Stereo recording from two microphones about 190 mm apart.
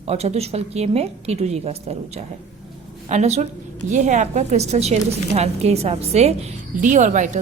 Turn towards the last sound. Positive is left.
turn(degrees=-40)  # may be behind; listen again after turning